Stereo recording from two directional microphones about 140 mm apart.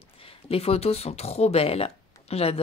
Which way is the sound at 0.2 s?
45° left (ahead or behind).